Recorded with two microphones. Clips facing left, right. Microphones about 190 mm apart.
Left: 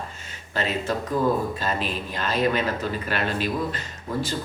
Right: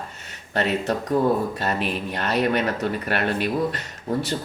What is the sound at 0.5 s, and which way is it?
Speech, 65° right (ahead or behind).